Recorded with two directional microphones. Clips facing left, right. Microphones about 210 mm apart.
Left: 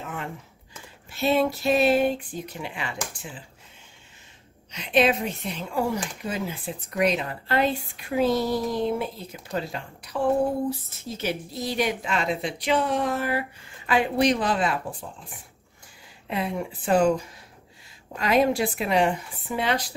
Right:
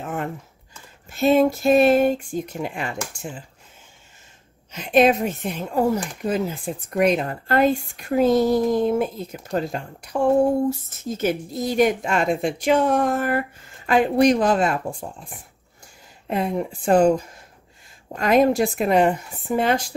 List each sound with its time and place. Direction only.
0.0 s a sound: 45° right (ahead or behind)
1.1 s speech: 45° right (ahead or behind)
4.7 s speech: 45° right (ahead or behind)
16.3 s speech: 45° right (ahead or behind)
18.1 s speech: 50° right (ahead or behind)